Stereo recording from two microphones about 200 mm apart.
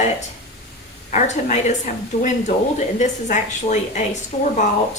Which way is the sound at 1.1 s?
40° left (ahead or behind).